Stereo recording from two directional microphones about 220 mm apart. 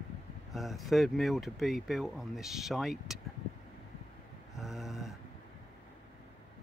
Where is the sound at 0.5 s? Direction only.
Centre (ahead or behind).